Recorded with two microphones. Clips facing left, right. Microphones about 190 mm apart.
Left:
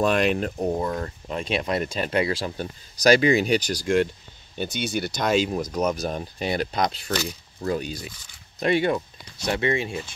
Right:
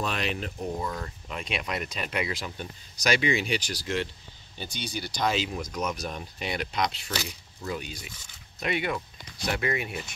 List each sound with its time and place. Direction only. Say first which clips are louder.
0.0 s speech: left 10 dB; 50° left (ahead or behind)
0.7 s speech: left 6 dB; 40° left (ahead or behind)